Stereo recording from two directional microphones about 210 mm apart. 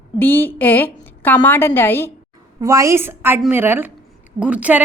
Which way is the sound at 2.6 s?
15° right (ahead or behind).